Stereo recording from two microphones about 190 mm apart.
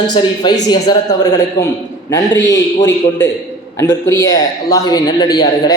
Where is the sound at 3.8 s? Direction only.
15° left (ahead or behind).